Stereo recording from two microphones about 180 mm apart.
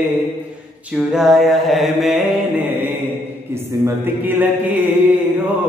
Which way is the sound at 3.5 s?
15° right (ahead or behind).